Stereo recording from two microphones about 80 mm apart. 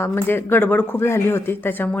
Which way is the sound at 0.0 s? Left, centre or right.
Left.